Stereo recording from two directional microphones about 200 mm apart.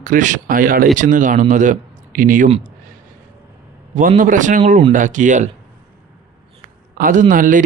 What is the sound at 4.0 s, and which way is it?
Speech, 40° right (ahead or behind).